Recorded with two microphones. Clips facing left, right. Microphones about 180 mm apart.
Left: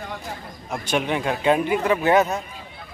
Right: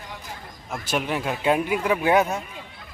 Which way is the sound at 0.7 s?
Centre (ahead or behind).